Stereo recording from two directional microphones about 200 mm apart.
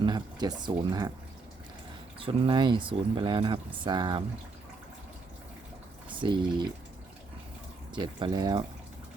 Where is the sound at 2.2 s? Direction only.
25° right (ahead or behind).